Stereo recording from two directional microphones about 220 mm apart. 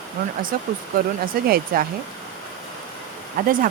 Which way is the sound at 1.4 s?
40° right (ahead or behind).